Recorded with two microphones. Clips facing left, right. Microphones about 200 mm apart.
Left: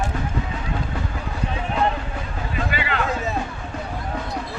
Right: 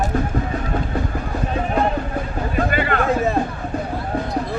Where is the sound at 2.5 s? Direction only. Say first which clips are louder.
Right 5 dB; 50° right (ahead or behind).